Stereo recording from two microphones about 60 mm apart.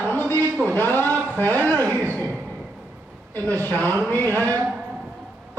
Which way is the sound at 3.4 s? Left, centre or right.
Left.